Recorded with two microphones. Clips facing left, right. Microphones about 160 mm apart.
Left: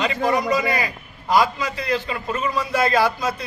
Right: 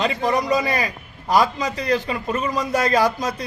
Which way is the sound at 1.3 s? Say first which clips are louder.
Even; 40° right (ahead or behind).